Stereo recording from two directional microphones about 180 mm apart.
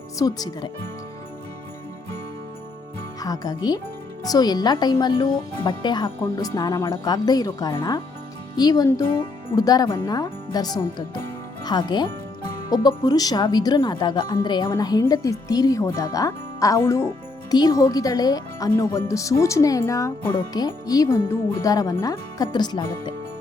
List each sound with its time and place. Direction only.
0.2 s speech: 20° left (ahead or behind)
3.2 s speech: 20° left (ahead or behind)